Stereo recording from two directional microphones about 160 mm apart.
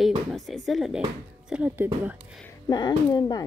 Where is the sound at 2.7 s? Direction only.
25° left (ahead or behind).